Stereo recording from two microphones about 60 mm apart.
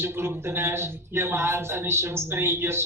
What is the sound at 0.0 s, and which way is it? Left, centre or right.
A man's voice, right.